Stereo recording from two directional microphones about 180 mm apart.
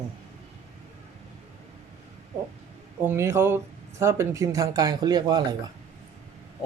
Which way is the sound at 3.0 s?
15° right (ahead or behind).